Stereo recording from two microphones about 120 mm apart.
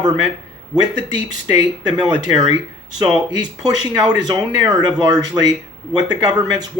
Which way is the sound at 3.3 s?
35° right (ahead or behind).